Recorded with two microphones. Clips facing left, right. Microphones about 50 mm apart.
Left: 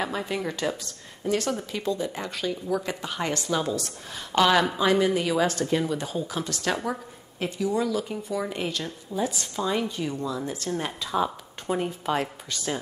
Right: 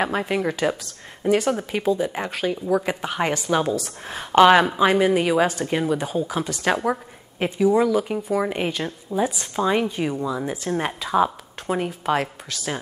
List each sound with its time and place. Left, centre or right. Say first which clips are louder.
0.3 s speech: right 6 dB; right
1.8 s speech: right 7 dB; centre
2.0 s speech: right 5 dB; right
3.6 s speech: right 4 dB; centre
4.1 s a woman's voice: right 7 dB; right
9.7 s speech: right 6 dB; right
12.2 s speech: right 3 dB; centre